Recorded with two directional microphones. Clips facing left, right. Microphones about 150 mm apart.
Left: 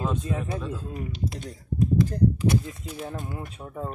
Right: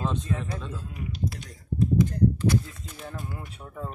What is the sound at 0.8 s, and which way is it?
Speech, 35° left (ahead or behind).